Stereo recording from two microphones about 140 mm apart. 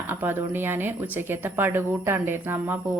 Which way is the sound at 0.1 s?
15° right (ahead or behind).